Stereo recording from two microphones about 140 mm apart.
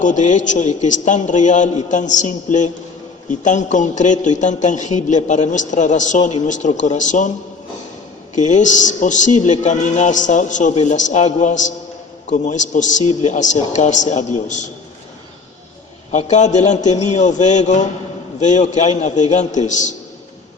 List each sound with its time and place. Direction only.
0.0 s a man's voice: 60° left (ahead or behind)
8.4 s a man's voice: 60° left (ahead or behind)
16.1 s a man's voice: 55° left (ahead or behind)